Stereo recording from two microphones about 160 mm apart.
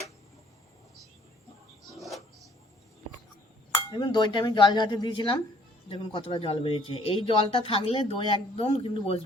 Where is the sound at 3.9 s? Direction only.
30° left (ahead or behind).